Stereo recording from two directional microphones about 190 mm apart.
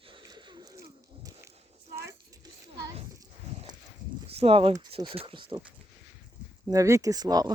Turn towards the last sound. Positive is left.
turn(degrees=-20)  # may be behind; listen again after turning